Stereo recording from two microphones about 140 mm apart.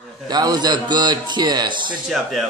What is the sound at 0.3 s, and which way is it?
A man's voice, 30° right (ahead or behind).